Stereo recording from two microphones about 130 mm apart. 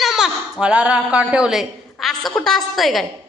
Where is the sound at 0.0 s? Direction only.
5° right (ahead or behind).